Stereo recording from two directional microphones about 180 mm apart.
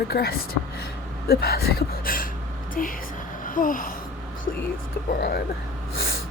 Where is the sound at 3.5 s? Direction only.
50° left (ahead or behind).